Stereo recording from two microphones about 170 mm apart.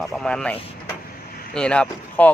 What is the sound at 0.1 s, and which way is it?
Speech, 5° left (ahead or behind).